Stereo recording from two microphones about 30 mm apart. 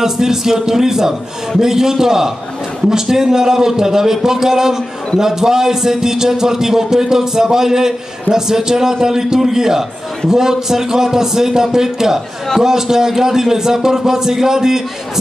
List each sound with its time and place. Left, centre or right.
0.0 s a man's voice: centre